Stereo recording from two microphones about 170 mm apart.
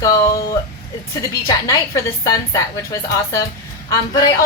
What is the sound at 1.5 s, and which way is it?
Speech, 20° left (ahead or behind).